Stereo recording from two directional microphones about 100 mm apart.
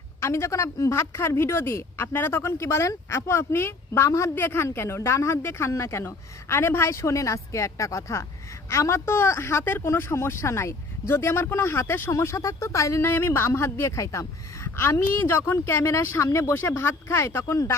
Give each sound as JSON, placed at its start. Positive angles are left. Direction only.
{"t": 0.2, "sound": "a woman's voice", "side_deg": 30}